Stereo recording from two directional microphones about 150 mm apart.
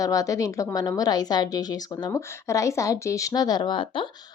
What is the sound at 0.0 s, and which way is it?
A woman's voice, 25° left (ahead or behind).